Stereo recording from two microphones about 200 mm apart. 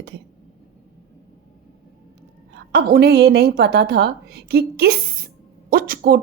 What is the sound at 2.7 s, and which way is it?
A woman's voice, 50° right (ahead or behind).